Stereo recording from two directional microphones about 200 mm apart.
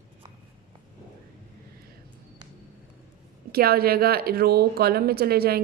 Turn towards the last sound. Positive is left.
turn(degrees=-50)  # may be behind; listen again after turning